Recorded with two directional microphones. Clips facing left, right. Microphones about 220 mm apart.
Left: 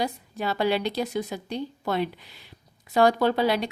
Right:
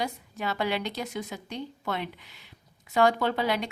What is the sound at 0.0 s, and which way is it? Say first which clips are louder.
A woman's voice: left 4 dB; 35° left (ahead or behind).